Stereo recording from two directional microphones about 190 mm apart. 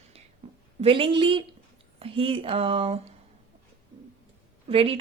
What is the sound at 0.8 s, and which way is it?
Speech, 30° right (ahead or behind).